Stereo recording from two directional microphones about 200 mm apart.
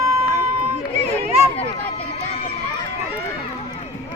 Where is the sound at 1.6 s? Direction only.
30° left (ahead or behind).